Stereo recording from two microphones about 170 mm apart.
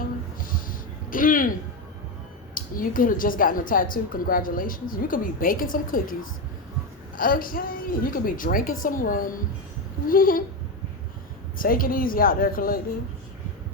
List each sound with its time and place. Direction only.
0.3 s a sound: 55° left (ahead or behind)
2.6 s a woman's voice: 55° left (ahead or behind)
7.2 s a woman's voice: 55° left (ahead or behind)
11.5 s a woman's voice: 55° left (ahead or behind)